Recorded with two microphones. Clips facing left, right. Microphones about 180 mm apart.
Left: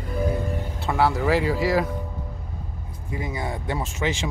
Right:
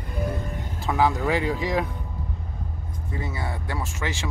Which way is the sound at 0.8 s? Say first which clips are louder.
Even; centre (ahead or behind).